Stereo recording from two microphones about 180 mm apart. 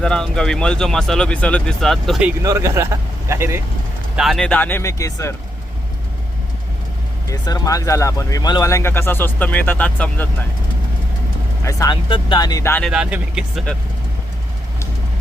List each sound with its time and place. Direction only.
0.0 s speech: 5° left (ahead or behind)
2.4 s speech: 15° right (ahead or behind)
4.2 s speech: centre (ahead or behind); by 5.3 s 15° left (ahead or behind)
7.3 s speech: 20° left (ahead or behind)
11.6 s speech: 20° left (ahead or behind)
12.8 s speech: 5° right (ahead or behind)